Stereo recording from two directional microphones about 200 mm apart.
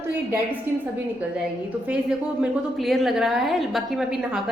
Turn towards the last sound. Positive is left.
turn(degrees=0)  # may be behind; listen again after turning